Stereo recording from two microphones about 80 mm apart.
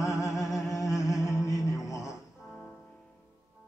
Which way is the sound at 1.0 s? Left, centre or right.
Left.